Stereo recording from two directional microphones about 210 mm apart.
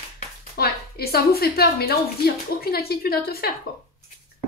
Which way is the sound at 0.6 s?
50° left (ahead or behind).